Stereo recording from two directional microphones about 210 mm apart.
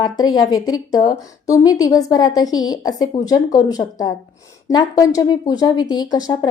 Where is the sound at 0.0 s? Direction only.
20° left (ahead or behind).